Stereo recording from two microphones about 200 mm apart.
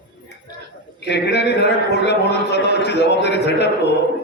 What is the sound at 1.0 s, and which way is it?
A man's voice, 55° left (ahead or behind).